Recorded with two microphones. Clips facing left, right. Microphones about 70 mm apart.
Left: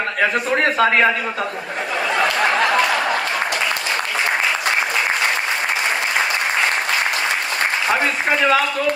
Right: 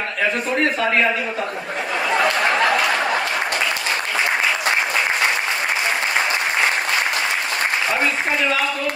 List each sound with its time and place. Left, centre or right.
0.2 s a man's voice: left